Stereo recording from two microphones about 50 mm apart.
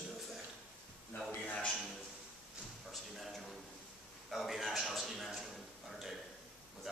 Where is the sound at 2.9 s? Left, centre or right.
Centre.